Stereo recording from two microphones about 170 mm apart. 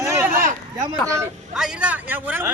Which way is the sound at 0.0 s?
15° right (ahead or behind).